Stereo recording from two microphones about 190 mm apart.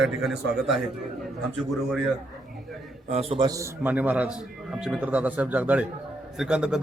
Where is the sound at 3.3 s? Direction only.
20° right (ahead or behind).